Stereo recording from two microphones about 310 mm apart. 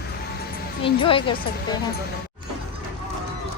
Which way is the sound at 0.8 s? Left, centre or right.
Centre.